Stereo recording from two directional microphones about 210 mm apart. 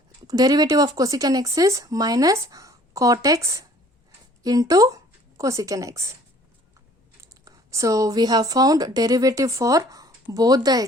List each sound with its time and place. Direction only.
0.3 s speech: 15° right (ahead or behind)
7.2 s speech: 15° right (ahead or behind)